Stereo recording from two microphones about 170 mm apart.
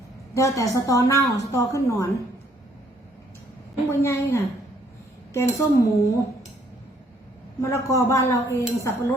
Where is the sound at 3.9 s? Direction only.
15° left (ahead or behind).